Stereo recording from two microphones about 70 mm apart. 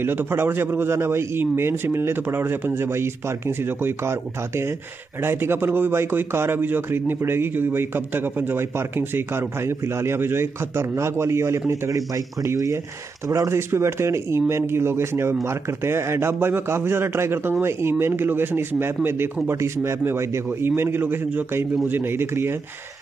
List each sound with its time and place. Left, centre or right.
0.0 s speech: right
13.3 s speech: right
19.6 s speech: right